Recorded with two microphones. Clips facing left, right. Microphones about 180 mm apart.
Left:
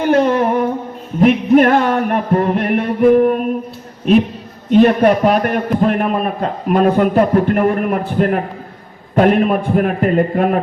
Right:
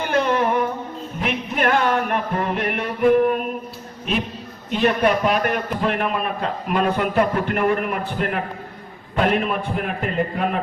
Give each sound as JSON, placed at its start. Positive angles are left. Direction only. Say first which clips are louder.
{"t": 0.0, "sound": "a sound", "louder": "left 7 dB", "side_deg": 45}
{"t": 1.2, "sound": "music", "louder": "left 13 dB", "side_deg": 45}
{"t": 4.7, "sound": "a man's voice", "louder": "left 8 dB", "side_deg": 45}